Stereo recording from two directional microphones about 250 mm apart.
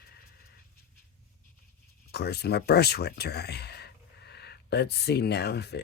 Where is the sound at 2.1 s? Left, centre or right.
Left.